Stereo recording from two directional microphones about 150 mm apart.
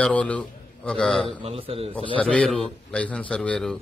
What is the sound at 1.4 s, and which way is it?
Speech, 40° right (ahead or behind).